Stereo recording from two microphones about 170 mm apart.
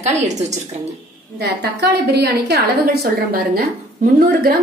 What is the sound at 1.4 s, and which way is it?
A woman's voice, 75° right (ahead or behind).